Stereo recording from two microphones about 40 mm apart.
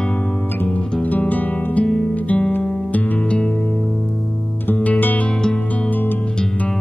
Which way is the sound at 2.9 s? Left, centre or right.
Left.